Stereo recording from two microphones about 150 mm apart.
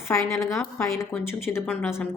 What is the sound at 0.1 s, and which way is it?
A woman's voice, 20° left (ahead or behind).